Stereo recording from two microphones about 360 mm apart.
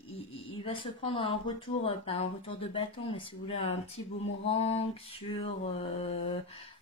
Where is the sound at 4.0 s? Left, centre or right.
Left.